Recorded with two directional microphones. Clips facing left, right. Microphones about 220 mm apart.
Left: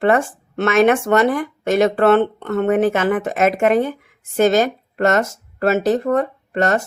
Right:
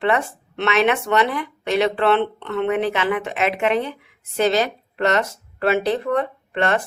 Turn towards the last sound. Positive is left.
turn(degrees=45)  # may be behind; listen again after turning